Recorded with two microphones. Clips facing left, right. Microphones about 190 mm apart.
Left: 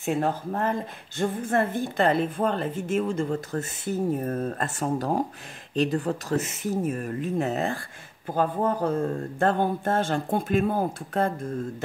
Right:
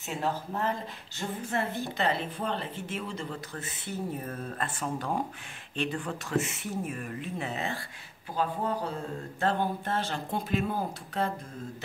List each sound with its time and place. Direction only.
0.0 s a woman's voice: 50° left (ahead or behind)